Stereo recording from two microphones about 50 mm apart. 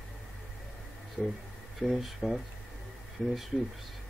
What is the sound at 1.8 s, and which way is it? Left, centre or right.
Speech, centre.